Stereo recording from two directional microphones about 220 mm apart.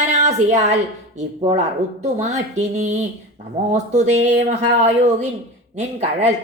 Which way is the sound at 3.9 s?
30° right (ahead or behind).